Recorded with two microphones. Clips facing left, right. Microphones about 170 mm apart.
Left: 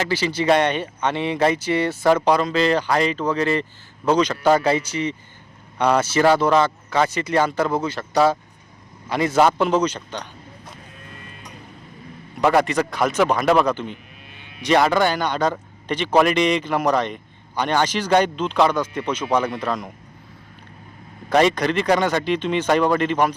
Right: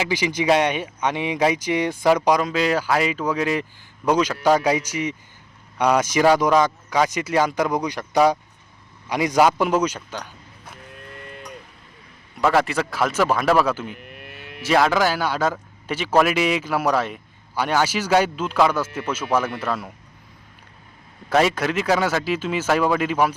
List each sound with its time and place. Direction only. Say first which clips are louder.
0.0 s speech: left 1 dB; 15° right (ahead or behind)
12.5 s speech: left 2 dB; 5° right (ahead or behind)
14.0 s vehicle: right 6 dB; 65° right (ahead or behind)
14.6 s speech: left 1 dB; centre (ahead or behind)
21.2 s speech: left 2 dB; 5° right (ahead or behind)